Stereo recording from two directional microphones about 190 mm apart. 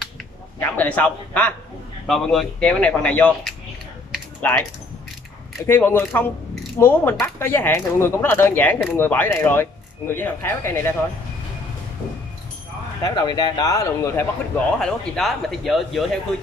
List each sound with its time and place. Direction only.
0.6 s a man's voice: 10° left (ahead or behind)
5.7 s speech: 10° left (ahead or behind)
13.0 s speech: 20° left (ahead or behind)
14.7 s speech: 5° left (ahead or behind)